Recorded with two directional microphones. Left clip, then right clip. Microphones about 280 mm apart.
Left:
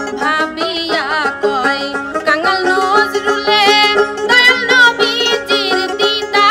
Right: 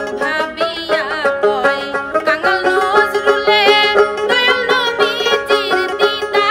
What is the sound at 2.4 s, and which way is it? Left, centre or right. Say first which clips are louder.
Music: left 1 dB; centre.